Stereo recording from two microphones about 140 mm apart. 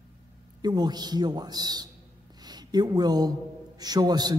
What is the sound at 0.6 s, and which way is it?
A man's voice, 30° right (ahead or behind).